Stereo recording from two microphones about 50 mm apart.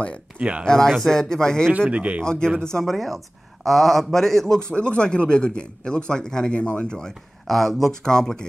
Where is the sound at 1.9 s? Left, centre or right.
Right.